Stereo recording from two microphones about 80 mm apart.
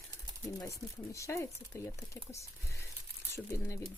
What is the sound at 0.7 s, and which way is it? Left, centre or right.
Speech, left.